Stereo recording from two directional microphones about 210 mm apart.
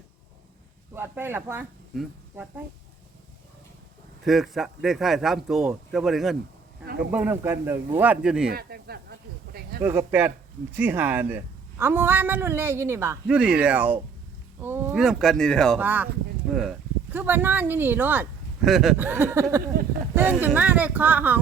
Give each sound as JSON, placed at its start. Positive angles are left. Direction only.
{"t": 0.9, "sound": "speech", "side_deg": -10}
{"t": 4.3, "sound": "speech", "side_deg": 0}
{"t": 8.5, "sound": "a sound", "side_deg": -45}
{"t": 9.8, "sound": "speech", "side_deg": -10}
{"t": 15.8, "sound": "speech", "side_deg": -10}